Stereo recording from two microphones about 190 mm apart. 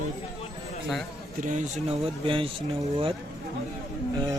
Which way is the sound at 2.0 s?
30° right (ahead or behind).